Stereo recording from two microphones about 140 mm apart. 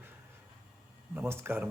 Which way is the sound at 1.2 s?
15° right (ahead or behind).